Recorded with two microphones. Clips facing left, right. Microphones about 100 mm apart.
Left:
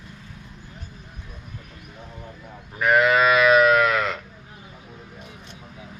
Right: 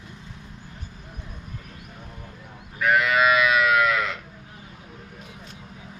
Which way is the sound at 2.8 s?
40° left (ahead or behind).